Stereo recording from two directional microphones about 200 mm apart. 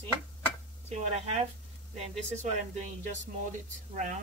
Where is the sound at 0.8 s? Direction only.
35° right (ahead or behind).